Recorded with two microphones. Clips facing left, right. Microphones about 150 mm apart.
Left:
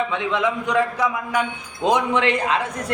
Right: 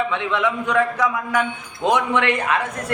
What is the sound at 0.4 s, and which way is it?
A man's voice, 35° left (ahead or behind).